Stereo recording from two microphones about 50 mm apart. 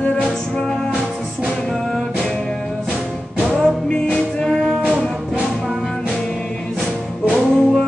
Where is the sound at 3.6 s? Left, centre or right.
Centre.